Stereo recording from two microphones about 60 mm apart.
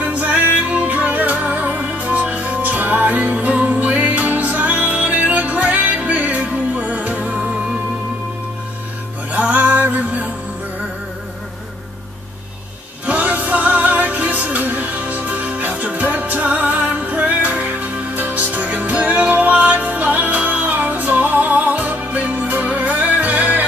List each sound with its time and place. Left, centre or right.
0.0 s music: right
9.3 s music: right
13.0 s music: right